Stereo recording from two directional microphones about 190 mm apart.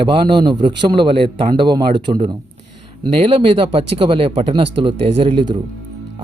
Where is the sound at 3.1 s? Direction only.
30° right (ahead or behind).